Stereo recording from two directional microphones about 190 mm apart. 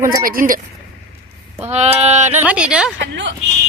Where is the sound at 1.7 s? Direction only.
35° right (ahead or behind).